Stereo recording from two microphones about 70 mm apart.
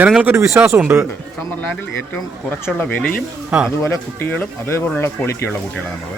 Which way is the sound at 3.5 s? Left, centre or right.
Centre.